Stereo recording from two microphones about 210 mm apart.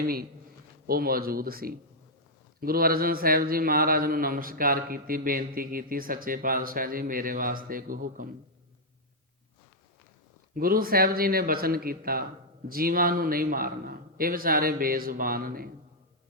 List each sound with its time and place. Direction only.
0.0 s speech: 45° right (ahead or behind)
10.5 s speech: 45° right (ahead or behind)